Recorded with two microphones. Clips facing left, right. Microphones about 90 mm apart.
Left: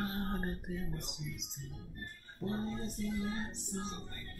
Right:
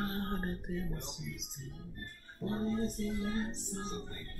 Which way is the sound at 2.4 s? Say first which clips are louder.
Right 1 dB; centre (ahead or behind).